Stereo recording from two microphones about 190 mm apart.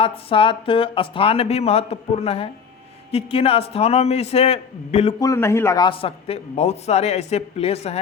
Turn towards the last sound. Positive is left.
turn(degrees=35)  # may be behind; listen again after turning